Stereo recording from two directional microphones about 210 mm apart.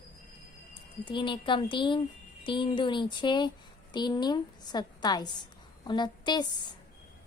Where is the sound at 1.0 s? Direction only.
20° left (ahead or behind).